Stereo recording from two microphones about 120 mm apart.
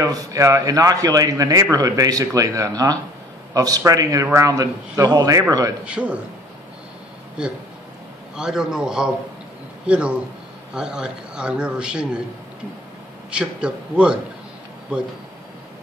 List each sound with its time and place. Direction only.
0.0 s a man's voice: 30° right (ahead or behind)
5.9 s a man's voice: 10° right (ahead or behind)
7.4 s a man's voice: 10° right (ahead or behind)
13.3 s a man's voice: 10° right (ahead or behind)